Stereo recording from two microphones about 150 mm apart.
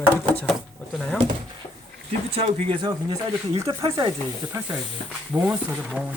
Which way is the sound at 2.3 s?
40° right (ahead or behind).